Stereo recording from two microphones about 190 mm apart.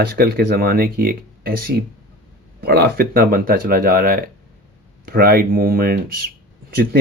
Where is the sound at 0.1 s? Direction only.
55° right (ahead or behind).